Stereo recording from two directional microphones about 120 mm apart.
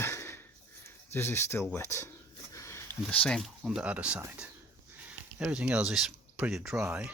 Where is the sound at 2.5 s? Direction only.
25° left (ahead or behind).